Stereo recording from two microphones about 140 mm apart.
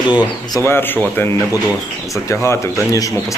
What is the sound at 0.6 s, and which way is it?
Speech, 15° left (ahead or behind).